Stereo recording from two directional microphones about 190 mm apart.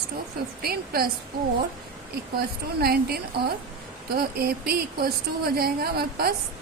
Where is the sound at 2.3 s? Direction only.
55° right (ahead or behind).